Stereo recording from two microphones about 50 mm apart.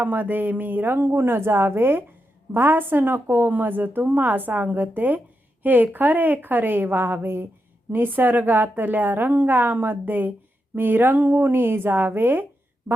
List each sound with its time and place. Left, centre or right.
0.0 s a woman's voice: right